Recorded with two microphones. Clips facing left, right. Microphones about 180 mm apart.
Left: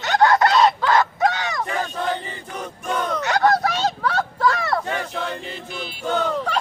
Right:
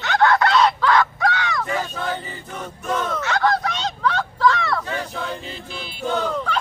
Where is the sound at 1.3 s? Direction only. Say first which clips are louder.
Right 2 dB; 45° left (ahead or behind).